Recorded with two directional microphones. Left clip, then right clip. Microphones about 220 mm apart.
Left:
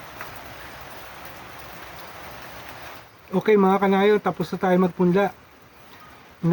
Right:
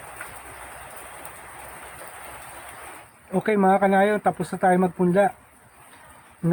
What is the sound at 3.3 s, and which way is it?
Speech, 5° right (ahead or behind).